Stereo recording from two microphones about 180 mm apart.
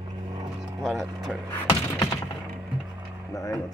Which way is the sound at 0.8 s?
Centre (ahead or behind).